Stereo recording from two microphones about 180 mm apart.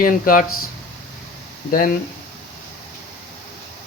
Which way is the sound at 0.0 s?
50° left (ahead or behind).